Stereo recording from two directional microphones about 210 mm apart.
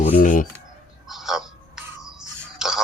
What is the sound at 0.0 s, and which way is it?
Speech, 40° left (ahead or behind).